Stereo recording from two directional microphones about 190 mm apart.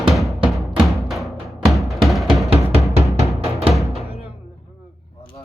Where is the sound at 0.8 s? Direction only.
Centre (ahead or behind).